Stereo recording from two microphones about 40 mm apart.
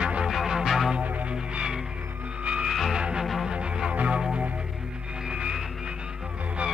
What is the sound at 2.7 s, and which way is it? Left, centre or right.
Music, centre.